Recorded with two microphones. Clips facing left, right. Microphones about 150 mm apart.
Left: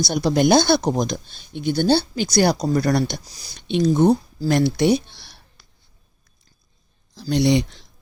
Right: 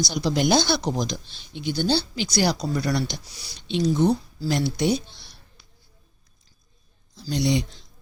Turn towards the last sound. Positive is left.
turn(degrees=65)  # may be behind; listen again after turning